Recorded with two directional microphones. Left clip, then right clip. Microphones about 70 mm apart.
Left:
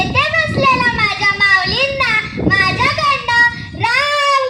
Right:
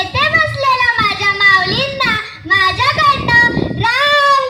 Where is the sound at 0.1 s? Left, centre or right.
Right.